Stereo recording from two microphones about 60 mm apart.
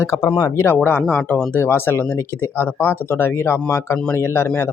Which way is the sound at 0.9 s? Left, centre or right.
Left.